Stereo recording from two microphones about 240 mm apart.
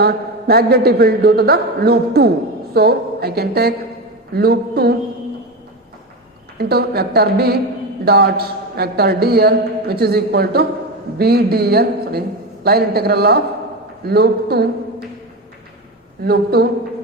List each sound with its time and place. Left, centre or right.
0.0 s a man's voice: right
6.6 s a man's voice: right
16.2 s a man's voice: right